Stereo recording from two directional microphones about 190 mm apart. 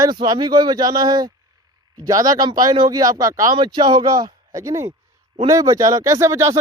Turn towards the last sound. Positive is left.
turn(degrees=-15)  # may be behind; listen again after turning